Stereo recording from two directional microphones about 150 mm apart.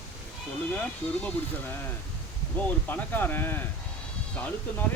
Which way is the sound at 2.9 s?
10° left (ahead or behind).